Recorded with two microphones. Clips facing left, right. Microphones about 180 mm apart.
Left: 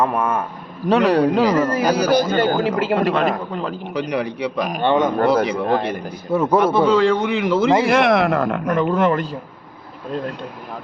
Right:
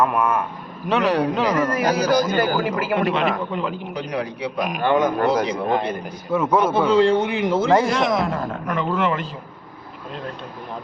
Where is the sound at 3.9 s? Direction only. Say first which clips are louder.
Left 4 dB; 70° left (ahead or behind).